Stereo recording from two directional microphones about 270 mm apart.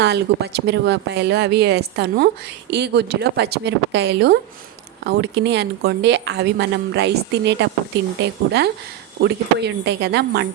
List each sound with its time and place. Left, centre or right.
0.0 s speech: right